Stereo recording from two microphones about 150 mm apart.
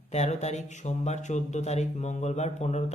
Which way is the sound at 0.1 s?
45° left (ahead or behind).